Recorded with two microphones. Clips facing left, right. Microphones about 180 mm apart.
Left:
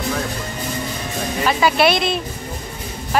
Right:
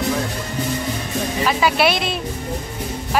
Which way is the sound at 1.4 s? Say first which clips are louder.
Left 2 dB; 5° right (ahead or behind).